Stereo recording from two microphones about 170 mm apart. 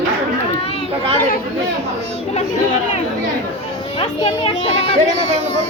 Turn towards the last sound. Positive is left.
turn(degrees=35)  # may be behind; listen again after turning